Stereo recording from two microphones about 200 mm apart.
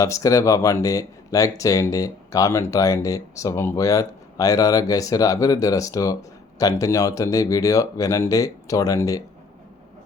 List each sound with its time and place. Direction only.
0.0 s speech: 15° left (ahead or behind)